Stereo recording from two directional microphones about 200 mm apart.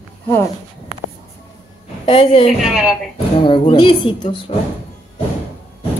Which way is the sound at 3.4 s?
25° left (ahead or behind).